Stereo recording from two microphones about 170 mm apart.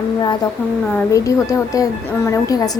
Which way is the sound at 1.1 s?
20° left (ahead or behind).